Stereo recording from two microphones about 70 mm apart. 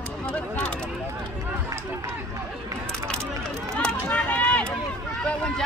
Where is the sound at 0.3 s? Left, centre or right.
Left.